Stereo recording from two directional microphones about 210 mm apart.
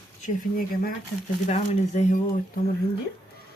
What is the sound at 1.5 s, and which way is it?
Speech, 30° left (ahead or behind).